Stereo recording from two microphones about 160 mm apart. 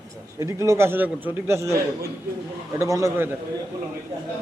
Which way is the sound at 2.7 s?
20° right (ahead or behind).